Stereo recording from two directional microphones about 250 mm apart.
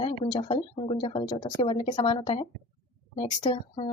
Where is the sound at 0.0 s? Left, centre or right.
Centre.